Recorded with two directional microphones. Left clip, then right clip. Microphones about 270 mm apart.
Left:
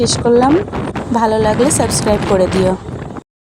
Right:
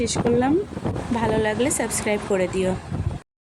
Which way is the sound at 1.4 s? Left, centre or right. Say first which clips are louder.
Left 9 dB; centre.